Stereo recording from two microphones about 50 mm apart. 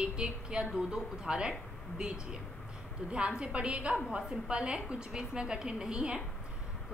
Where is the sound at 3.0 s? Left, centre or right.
Centre.